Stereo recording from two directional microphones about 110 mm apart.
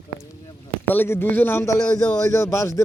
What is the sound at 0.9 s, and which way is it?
Speech, 20° left (ahead or behind).